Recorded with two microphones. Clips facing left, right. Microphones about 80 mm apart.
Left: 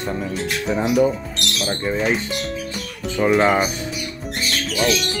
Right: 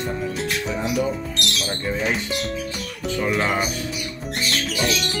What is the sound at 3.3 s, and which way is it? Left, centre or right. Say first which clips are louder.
Speech: left 7 dB; left.